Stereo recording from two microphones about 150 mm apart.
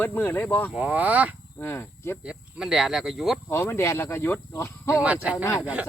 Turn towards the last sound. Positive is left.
turn(degrees=-5)  # may be behind; listen again after turning